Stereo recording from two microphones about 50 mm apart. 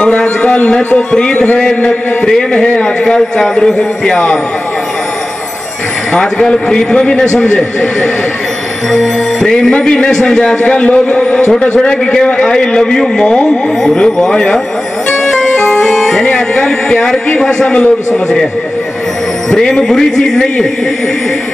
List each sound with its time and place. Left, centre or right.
0.0 s a sound: left
0.9 s a man's voice: left
6.1 s a man's voice: centre
8.9 s a man's voice: centre
10.6 s a man's voice: left
15.8 s music: centre
16.3 s a man's voice: centre
19.5 s a man's voice: centre